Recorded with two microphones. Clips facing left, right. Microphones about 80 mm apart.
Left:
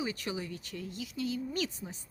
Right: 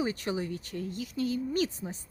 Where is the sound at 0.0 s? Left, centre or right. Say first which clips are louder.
Right 5 dB; right.